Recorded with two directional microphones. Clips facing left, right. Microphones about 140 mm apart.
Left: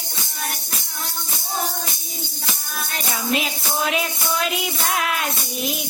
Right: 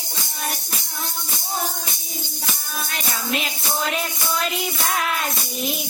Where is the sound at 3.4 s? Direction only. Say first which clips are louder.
Left 2 dB; 5° left (ahead or behind).